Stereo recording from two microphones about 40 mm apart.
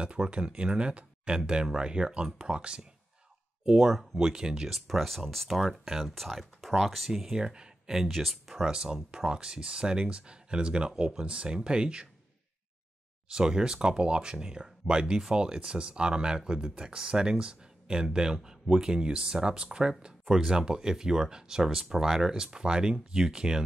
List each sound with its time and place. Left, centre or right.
0.0 s speech: right; by 4.3 s centre
4.3 s speech: centre
4.6 s speech: centre
7.1 s speech: centre
7.9 s speech: centre
8.6 s speech: centre
13.3 s speech: centre